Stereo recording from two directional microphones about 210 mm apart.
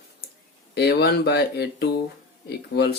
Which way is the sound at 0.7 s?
50° left (ahead or behind).